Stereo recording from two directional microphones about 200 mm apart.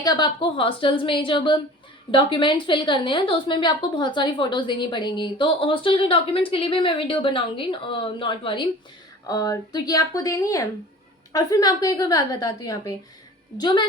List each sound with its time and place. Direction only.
0.0 s a woman's voice: 20° left (ahead or behind)